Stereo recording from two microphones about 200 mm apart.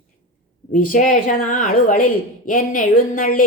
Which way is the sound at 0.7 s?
40° left (ahead or behind).